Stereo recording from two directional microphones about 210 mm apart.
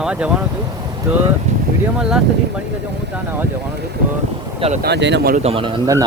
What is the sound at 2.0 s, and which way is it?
Speech, 5° right (ahead or behind).